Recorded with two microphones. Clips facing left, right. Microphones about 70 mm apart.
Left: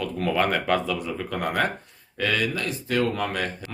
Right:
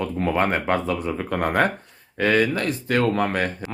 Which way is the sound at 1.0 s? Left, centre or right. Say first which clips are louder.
Right 4 dB; right.